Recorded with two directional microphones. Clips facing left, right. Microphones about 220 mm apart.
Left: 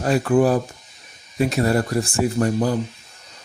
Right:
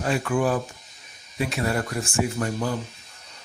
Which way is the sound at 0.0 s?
40° left (ahead or behind).